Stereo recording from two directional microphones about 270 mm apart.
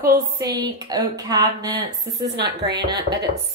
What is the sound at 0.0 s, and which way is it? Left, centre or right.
Speech, right.